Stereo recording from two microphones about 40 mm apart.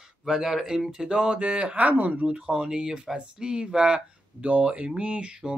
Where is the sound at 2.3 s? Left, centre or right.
Right.